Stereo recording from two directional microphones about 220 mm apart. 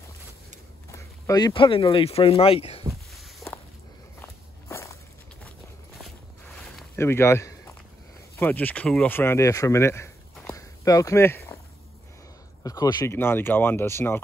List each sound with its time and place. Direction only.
0.9 s speech: 15° left (ahead or behind)
3.1 s walk: centre (ahead or behind)
4.2 s walk: 15° left (ahead or behind)
7.0 s speech: 10° left (ahead or behind)
10.5 s a sound: 15° left (ahead or behind)
12.6 s speech: 15° left (ahead or behind)